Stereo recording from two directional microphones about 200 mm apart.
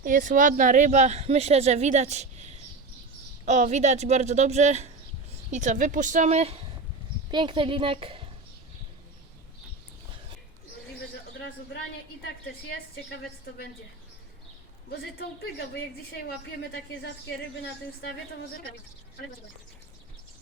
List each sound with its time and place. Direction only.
0.0 s a woman's voice: 40° right (ahead or behind)